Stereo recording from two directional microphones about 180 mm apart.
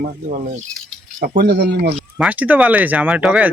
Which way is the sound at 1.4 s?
65° right (ahead or behind).